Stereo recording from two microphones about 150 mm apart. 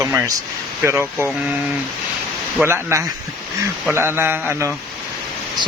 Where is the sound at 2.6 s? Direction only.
15° right (ahead or behind).